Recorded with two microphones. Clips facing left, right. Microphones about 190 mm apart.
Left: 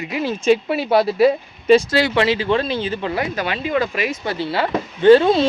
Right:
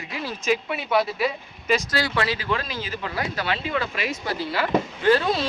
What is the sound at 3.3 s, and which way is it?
Speech, 15° left (ahead or behind).